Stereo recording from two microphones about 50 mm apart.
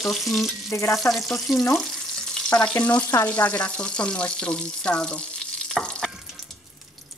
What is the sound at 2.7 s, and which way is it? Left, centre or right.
Frying, left.